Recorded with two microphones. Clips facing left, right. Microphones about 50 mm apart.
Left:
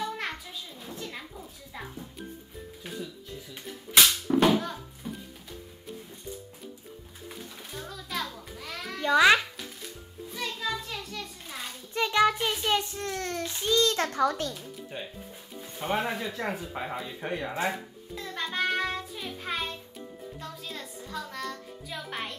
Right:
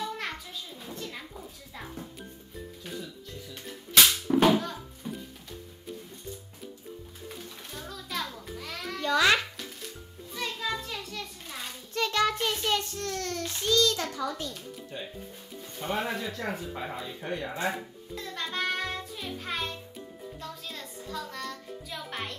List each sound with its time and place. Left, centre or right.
0.0 s a sound: centre
4.3 s music: centre
7.2 s music: centre
9.0 s speech: centre
10.3 s children playing: centre
11.9 s child singing: centre
13.5 s speech: centre
13.9 s a child's voice: left
14.9 s speech: centre
17.6 s music: centre